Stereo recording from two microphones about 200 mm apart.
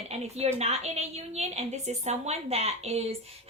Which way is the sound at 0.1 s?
30° right (ahead or behind).